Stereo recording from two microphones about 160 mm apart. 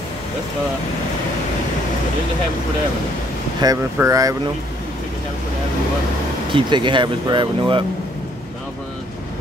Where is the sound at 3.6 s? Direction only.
25° right (ahead or behind).